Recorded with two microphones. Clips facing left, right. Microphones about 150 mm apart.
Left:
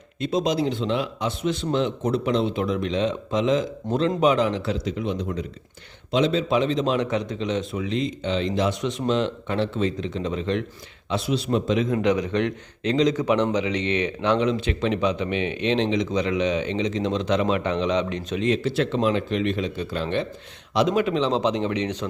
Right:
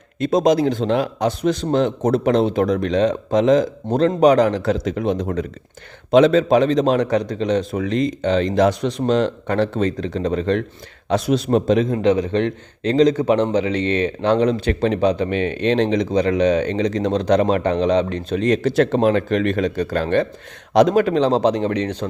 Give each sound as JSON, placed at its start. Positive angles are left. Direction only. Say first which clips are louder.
{"t": 0.2, "sound": "a man's voice", "louder": "right 7 dB", "side_deg": -45}